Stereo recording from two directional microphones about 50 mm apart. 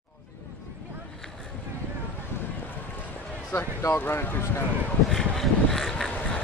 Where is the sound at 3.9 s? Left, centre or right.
Left.